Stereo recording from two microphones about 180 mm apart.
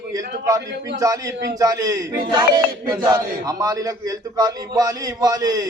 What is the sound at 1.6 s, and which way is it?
A man's voice, 20° right (ahead or behind).